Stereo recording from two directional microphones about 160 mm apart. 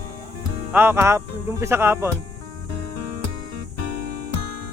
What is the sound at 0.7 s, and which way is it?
Speech, 15° right (ahead or behind).